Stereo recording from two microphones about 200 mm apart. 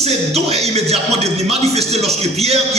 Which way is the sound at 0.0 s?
30° right (ahead or behind).